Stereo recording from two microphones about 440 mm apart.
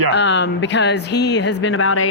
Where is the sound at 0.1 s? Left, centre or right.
Left.